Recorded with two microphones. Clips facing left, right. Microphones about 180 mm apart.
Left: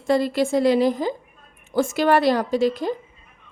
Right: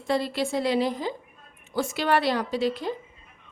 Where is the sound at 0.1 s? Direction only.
45° left (ahead or behind).